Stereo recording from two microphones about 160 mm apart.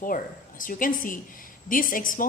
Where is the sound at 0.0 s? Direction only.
60° left (ahead or behind).